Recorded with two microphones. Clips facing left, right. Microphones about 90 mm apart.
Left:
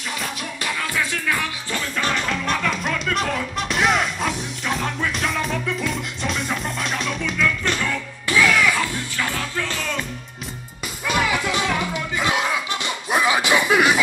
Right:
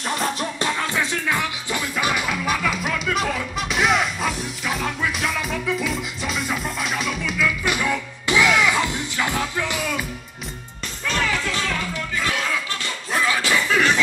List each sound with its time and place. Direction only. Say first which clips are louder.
0.1 s music: right 6 dB; 30° right (ahead or behind); by 10.0 s 10° right (ahead or behind)
11.1 s music: left 2 dB; 15° left (ahead or behind)